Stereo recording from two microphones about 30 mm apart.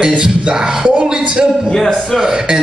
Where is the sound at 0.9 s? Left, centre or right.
Right.